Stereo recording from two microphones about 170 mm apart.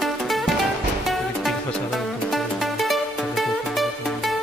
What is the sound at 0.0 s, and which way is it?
Music, centre (ahead or behind).